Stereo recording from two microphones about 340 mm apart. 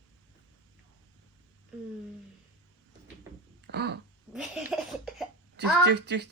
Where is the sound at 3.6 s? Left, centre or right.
Right.